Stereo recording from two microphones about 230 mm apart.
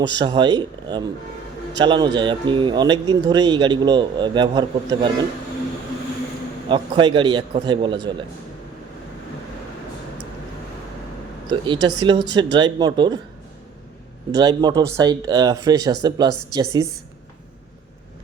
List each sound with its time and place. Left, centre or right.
0.1 s a man's voice: centre
6.7 s a man's voice: right
11.6 s a man's voice: centre
14.3 s speech: centre